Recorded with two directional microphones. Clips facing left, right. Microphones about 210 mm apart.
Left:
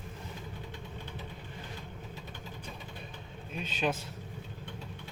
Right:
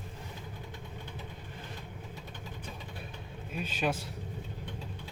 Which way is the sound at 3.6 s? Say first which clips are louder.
Even; 10° right (ahead or behind).